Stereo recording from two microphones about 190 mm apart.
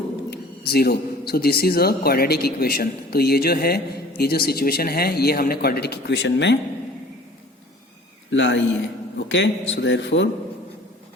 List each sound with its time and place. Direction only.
0.3 s speech: 55° left (ahead or behind)
8.3 s a man's voice: 75° left (ahead or behind)